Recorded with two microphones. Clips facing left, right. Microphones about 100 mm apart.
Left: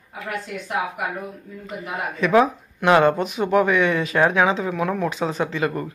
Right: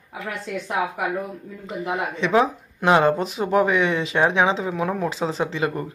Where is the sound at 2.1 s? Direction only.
25° right (ahead or behind).